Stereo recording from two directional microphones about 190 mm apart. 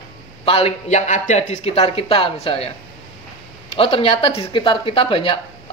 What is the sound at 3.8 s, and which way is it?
Speech, 30° left (ahead or behind).